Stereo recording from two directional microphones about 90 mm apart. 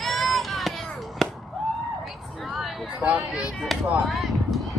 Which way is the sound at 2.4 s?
Centre (ahead or behind).